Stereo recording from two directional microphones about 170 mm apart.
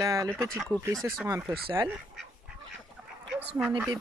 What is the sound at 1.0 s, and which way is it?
Speech, 15° right (ahead or behind).